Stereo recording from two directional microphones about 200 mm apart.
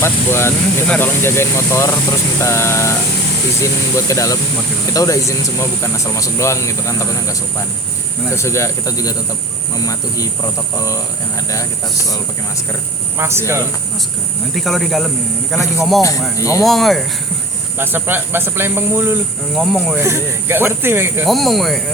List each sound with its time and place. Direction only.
0.0 s speech: 10° left (ahead or behind)
13.1 s speech: 10° right (ahead or behind)
14.5 s speech: centre (ahead or behind)
15.5 s speech: 15° left (ahead or behind)
16.6 s speech: centre (ahead or behind)
17.7 s speech: 10° right (ahead or behind)
19.5 s speech: centre (ahead or behind)
20.0 s speech: 15° right (ahead or behind)
21.2 s speech: centre (ahead or behind)